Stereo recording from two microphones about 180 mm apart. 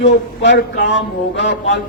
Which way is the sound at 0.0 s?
75° left (ahead or behind).